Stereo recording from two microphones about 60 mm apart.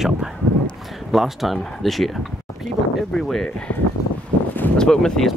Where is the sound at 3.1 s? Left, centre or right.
Centre.